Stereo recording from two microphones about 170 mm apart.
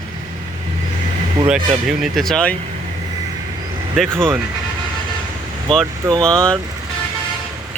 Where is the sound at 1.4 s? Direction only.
5° right (ahead or behind).